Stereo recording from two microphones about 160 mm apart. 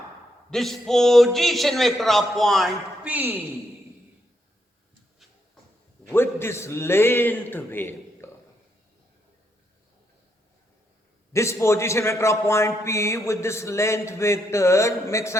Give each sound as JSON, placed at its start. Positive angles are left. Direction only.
{"t": 0.5, "sound": "a man's voice", "side_deg": 0}
{"t": 6.1, "sound": "a man's voice", "side_deg": 15}
{"t": 11.3, "sound": "a man's voice", "side_deg": 20}